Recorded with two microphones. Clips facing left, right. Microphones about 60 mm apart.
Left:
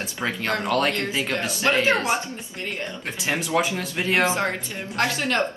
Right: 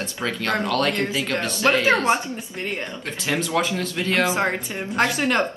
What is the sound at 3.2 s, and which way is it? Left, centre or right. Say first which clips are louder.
Speech: even; centre.